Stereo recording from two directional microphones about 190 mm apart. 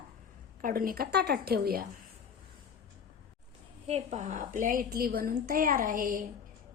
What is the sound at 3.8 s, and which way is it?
A woman's voice, 35° right (ahead or behind).